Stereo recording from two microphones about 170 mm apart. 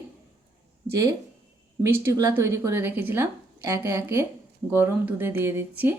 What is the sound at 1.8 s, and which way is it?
Speech, 15° right (ahead or behind).